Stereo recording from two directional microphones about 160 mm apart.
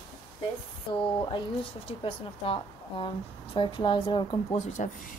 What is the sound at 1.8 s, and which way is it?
A woman's voice, 35° left (ahead or behind).